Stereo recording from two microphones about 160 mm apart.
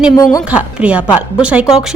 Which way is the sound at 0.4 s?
10° right (ahead or behind).